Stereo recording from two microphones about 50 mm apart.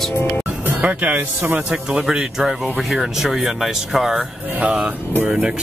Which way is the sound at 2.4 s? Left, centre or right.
Centre.